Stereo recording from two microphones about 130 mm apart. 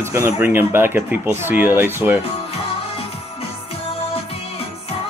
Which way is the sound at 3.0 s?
50° left (ahead or behind).